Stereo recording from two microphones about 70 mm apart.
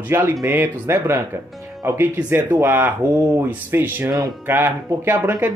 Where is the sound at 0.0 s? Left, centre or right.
Right.